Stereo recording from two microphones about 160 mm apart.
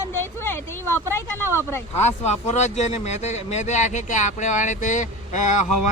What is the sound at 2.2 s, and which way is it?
Speech, 45° left (ahead or behind).